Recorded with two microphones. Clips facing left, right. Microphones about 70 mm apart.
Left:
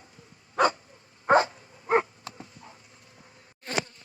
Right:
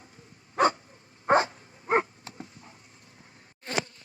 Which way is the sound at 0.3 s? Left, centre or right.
Right.